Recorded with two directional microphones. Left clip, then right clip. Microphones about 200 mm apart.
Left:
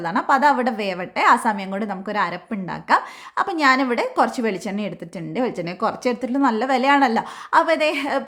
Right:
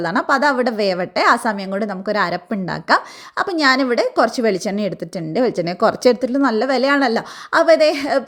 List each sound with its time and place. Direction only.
0.0 s a woman's voice: 25° right (ahead or behind)
6.3 s a woman's voice: 15° right (ahead or behind)